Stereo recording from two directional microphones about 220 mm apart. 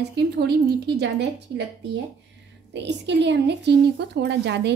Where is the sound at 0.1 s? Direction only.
50° right (ahead or behind).